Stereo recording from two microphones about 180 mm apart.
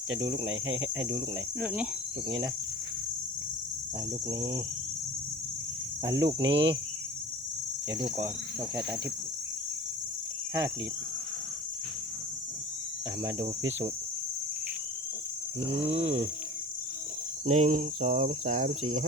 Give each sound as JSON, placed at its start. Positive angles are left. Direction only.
{"t": 0.4, "sound": "speech", "side_deg": -90}
{"t": 1.6, "sound": "cricket", "side_deg": -10}
{"t": 4.3, "sound": "cricket", "side_deg": -20}
{"t": 6.1, "sound": "cricket", "side_deg": -20}
{"t": 6.4, "sound": "speech", "side_deg": -75}
{"t": 15.6, "sound": "a sound", "side_deg": -35}
{"t": 15.9, "sound": "speech", "side_deg": -90}
{"t": 17.4, "sound": "cricket", "side_deg": -40}